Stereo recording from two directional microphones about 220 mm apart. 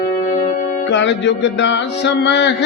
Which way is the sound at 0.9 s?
55° left (ahead or behind).